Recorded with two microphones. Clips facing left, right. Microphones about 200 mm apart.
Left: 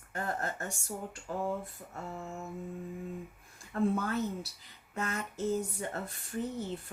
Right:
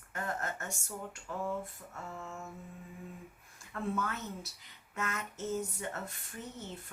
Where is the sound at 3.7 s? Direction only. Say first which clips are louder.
Left 6 dB; 35° left (ahead or behind).